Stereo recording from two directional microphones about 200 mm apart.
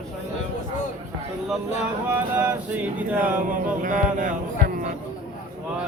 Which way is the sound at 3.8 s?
40° right (ahead or behind).